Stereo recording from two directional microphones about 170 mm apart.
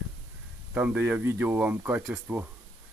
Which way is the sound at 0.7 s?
10° right (ahead or behind).